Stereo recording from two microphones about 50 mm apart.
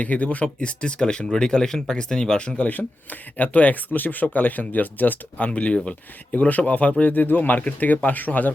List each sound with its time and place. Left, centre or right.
0.0 s speech: left; by 2.6 s centre
2.6 s speech: left
5.4 s speech: left